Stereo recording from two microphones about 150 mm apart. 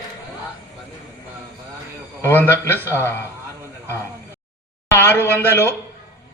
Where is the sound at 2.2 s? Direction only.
15° left (ahead or behind).